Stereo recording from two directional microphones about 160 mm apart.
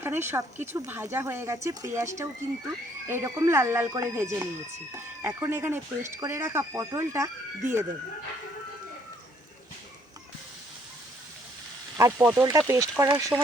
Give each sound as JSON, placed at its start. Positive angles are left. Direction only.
{"t": 0.0, "sound": "speech", "side_deg": -15}
{"t": 12.1, "sound": "speech", "side_deg": -10}
{"t": 12.5, "sound": "speech", "side_deg": -20}